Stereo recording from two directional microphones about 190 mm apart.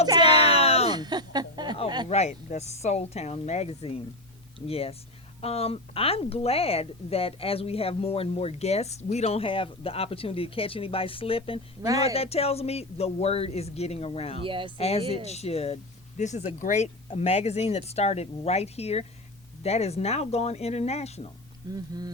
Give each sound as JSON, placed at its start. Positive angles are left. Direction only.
{"t": 0.2, "sound": "a sound", "side_deg": 30}
{"t": 0.9, "sound": "a sound", "side_deg": -20}
{"t": 2.0, "sound": "a woman's voice", "side_deg": 35}
{"t": 11.8, "sound": "speech", "side_deg": -20}
{"t": 12.0, "sound": "a woman's voice", "side_deg": 30}
{"t": 14.4, "sound": "speech", "side_deg": -25}
{"t": 14.8, "sound": "a woman's voice", "side_deg": 35}
{"t": 21.7, "sound": "speech", "side_deg": -20}